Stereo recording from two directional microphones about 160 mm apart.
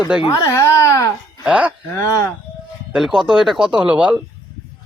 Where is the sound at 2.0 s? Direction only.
20° left (ahead or behind).